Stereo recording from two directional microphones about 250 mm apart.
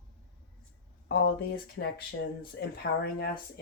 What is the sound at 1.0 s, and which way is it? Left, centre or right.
Speech, left.